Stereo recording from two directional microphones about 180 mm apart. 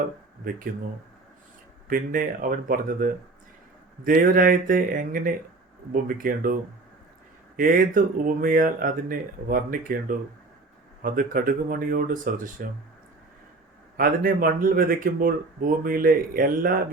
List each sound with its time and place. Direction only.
0.4 s speech: 50° right (ahead or behind)
1.9 s speech: 50° right (ahead or behind)
13.9 s speech: 55° right (ahead or behind)